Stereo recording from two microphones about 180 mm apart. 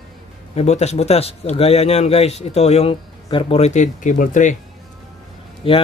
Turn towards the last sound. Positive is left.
turn(degrees=30)  # may be behind; listen again after turning